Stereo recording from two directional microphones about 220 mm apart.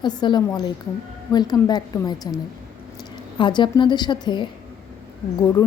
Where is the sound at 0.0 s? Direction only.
20° left (ahead or behind).